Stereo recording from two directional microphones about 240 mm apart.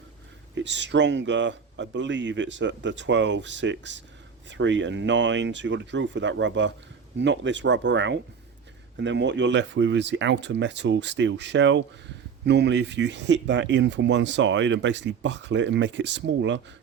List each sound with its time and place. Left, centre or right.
0.5 s speech: right